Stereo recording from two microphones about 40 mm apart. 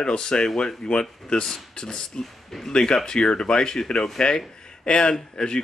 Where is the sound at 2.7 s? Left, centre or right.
Centre.